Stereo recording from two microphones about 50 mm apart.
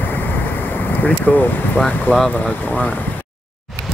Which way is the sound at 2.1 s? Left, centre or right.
Centre.